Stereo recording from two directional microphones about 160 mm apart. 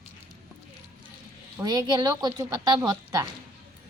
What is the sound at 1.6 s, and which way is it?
A woman's voice, 25° right (ahead or behind).